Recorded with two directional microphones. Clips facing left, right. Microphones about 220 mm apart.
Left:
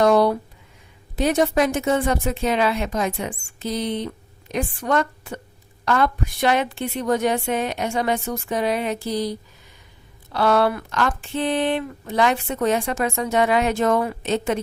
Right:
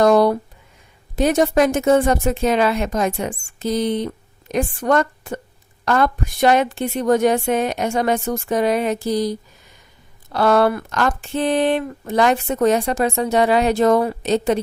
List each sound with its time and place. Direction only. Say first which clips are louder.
0.0 s a sound: right 3 dB; 45° right (ahead or behind)
1.1 s a woman's voice: right 3 dB; 45° right (ahead or behind)
10.3 s speech: right 3 dB; 45° right (ahead or behind)